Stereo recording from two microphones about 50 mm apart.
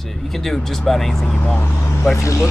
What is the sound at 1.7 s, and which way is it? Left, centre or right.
Speech, left.